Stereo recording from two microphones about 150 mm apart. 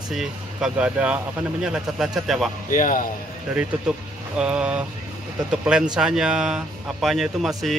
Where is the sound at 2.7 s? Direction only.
65° left (ahead or behind).